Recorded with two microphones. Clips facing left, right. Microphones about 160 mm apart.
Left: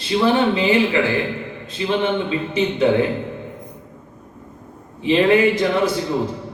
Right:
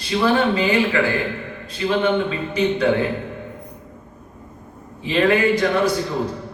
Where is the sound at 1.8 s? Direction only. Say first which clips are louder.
Even; 20° left (ahead or behind).